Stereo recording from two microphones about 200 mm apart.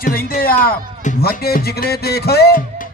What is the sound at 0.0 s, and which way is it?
Speech, 45° left (ahead or behind).